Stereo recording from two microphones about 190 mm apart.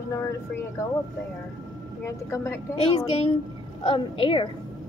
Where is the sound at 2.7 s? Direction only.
30° left (ahead or behind).